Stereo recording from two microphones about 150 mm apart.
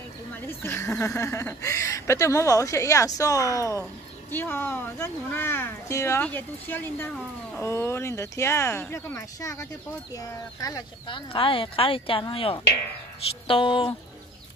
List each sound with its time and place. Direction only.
0.5 s speech: 15° left (ahead or behind); by 13.9 s 35° left (ahead or behind)